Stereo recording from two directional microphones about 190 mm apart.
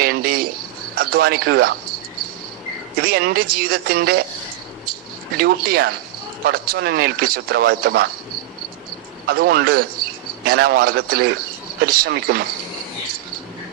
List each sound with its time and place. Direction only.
0.0 s a sound: 50° right (ahead or behind)
0.9 s speech: 55° right (ahead or behind)
3.0 s speech: 55° right (ahead or behind)
5.4 s a man's voice: 55° right (ahead or behind)
9.2 s a man's voice: 55° right (ahead or behind)